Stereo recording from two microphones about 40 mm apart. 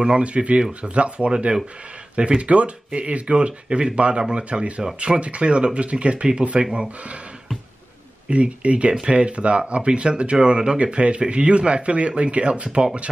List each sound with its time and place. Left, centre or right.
0.2 s speech: right
8.3 s speech: right